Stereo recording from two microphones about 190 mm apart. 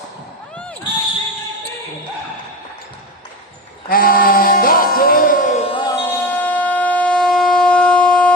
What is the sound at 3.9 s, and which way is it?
Music, 50° left (ahead or behind).